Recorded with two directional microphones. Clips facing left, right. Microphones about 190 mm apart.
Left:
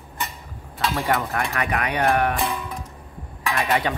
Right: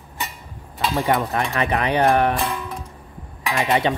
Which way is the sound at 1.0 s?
25° right (ahead or behind).